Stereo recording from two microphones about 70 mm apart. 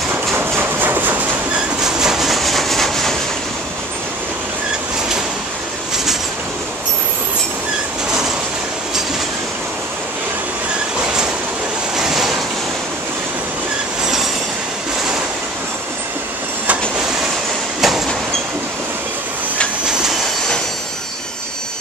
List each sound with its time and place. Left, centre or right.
0.4 s a sound: right
1.8 s train: centre
12.0 s waves: centre
17.7 s train: centre
19.9 s train: centre